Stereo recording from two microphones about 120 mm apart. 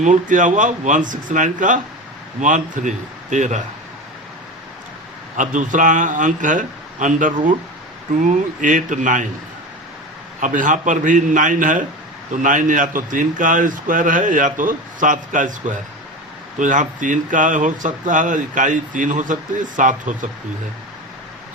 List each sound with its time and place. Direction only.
0.0 s speech: 90° right
5.4 s speech: 90° right
10.4 s speech: 90° right